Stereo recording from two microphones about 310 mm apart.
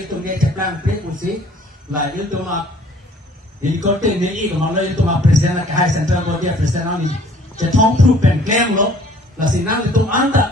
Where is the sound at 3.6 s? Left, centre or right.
Right.